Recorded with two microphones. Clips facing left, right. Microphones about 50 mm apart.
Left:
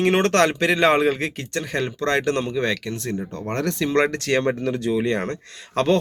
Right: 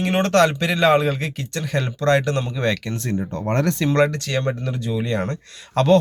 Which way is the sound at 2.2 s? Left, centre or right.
Left.